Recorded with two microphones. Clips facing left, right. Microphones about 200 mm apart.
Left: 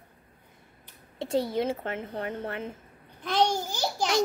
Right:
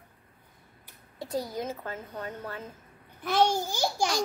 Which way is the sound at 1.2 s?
25° left (ahead or behind).